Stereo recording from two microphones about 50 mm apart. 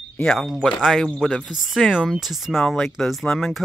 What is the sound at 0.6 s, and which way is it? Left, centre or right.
Speech, centre.